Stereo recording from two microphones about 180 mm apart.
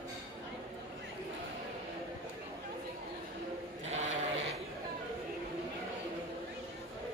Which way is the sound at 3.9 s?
40° right (ahead or behind).